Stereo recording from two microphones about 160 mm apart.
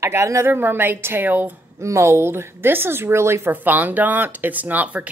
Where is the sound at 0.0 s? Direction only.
20° right (ahead or behind).